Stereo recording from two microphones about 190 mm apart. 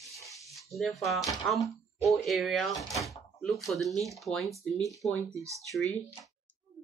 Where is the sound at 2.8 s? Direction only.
15° left (ahead or behind).